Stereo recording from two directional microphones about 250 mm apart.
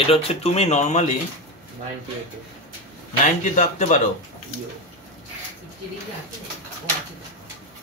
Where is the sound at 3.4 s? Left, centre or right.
Left.